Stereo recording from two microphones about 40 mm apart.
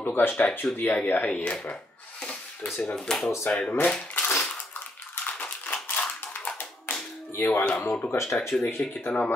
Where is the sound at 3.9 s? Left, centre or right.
Left.